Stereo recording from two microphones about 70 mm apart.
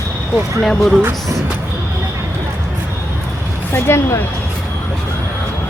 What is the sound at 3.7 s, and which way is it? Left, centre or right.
Speech, left.